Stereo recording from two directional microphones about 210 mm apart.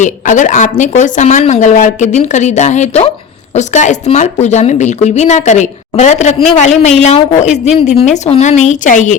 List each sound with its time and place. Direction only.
0.0 s a woman's voice: 35° left (ahead or behind)